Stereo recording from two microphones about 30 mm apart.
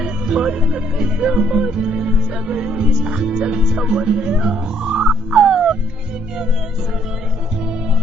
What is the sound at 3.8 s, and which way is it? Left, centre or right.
Speech, right.